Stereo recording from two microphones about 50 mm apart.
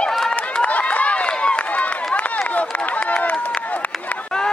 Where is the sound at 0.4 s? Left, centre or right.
Left.